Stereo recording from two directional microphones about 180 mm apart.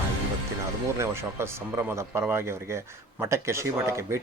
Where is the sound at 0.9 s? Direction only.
15° right (ahead or behind).